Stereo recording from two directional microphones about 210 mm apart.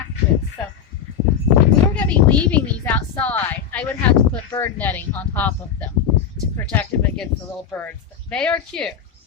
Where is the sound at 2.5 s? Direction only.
10° left (ahead or behind).